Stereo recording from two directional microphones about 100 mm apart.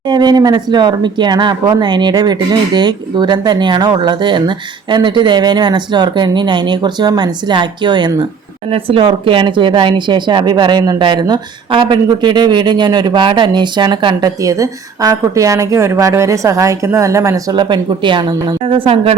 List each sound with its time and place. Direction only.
0.1 s speech: 45° right (ahead or behind)
8.7 s speech: 65° right (ahead or behind); by 17.6 s 35° right (ahead or behind)
17.6 s speech: 50° right (ahead or behind)
18.6 s speech: 65° right (ahead or behind)